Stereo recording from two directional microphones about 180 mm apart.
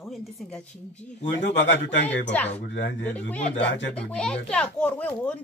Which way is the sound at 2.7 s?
80° left.